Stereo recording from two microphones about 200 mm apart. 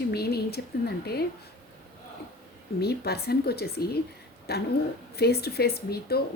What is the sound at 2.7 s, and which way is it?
Speech, 50° left (ahead or behind).